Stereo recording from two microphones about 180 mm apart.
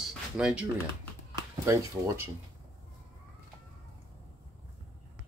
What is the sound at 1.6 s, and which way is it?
Speech, 15° right (ahead or behind).